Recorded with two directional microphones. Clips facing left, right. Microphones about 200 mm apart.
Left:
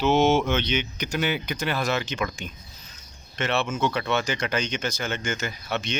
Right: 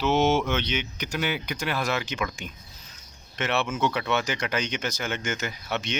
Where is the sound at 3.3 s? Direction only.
15° right (ahead or behind).